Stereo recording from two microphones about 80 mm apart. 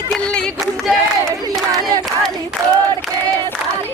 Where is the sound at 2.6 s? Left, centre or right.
Right.